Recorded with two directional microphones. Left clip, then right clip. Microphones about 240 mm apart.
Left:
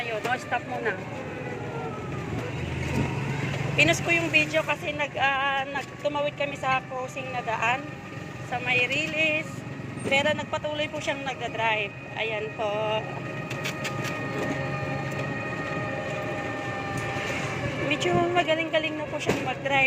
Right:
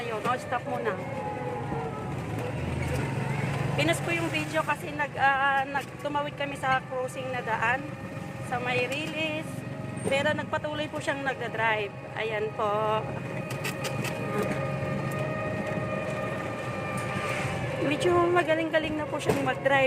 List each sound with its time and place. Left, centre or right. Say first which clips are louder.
3.8 s a man's voice: left 6 dB; centre; by 13.0 s right
18.0 s a man's voice: right 1 dB; centre